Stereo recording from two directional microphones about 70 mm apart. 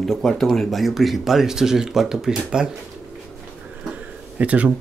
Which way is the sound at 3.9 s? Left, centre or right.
Centre.